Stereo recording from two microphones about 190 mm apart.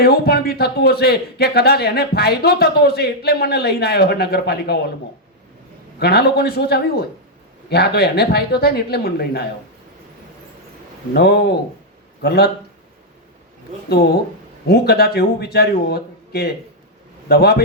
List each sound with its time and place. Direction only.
0.0 s a man's voice: 55° left (ahead or behind)
6.0 s a man's voice: 60° left (ahead or behind)
11.1 s a man's voice: 60° left (ahead or behind)
13.9 s a man's voice: 55° left (ahead or behind)